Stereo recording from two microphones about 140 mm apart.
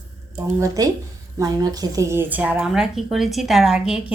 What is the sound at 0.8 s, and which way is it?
A woman's voice, 25° right (ahead or behind).